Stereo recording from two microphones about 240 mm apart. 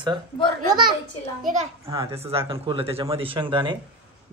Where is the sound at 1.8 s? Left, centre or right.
Centre.